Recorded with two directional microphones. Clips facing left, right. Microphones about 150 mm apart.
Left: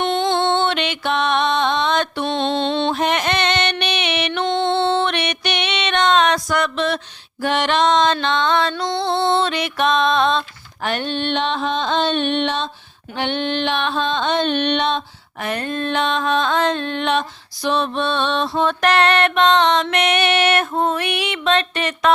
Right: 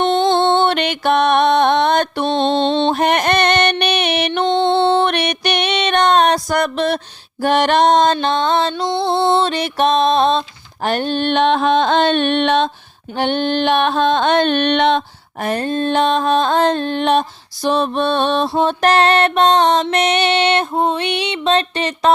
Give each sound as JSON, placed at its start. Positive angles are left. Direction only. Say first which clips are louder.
{"t": 0.0, "sound": "music", "louder": "right 4 dB", "side_deg": -30}
{"t": 0.6, "sound": "music", "louder": "right 4 dB", "side_deg": -45}
{"t": 2.2, "sound": "music", "louder": "right 4 dB", "side_deg": -35}
{"t": 2.9, "sound": "music", "louder": "right 4 dB", "side_deg": -55}
{"t": 4.3, "sound": "music", "louder": "right 4 dB", "side_deg": -25}
{"t": 5.0, "sound": "music", "louder": "right 4 dB", "side_deg": -40}
{"t": 10.8, "sound": "a sound", "louder": "right 4 dB", "side_deg": -40}
{"t": 13.1, "sound": "a sound", "louder": "right 4 dB", "side_deg": -40}
{"t": 15.4, "sound": "music", "louder": "right 5 dB", "side_deg": -35}